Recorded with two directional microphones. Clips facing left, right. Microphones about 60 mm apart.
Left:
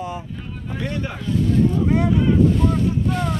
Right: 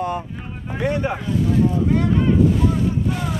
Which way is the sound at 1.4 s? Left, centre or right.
Centre.